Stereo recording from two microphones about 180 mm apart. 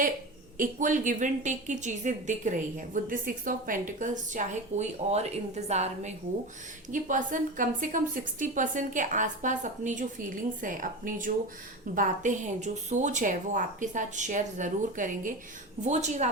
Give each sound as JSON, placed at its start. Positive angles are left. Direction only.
{"t": 0.5, "sound": "a woman's voice", "side_deg": -45}